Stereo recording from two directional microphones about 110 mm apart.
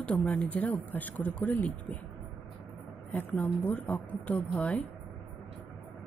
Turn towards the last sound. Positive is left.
turn(degrees=15)  # may be behind; listen again after turning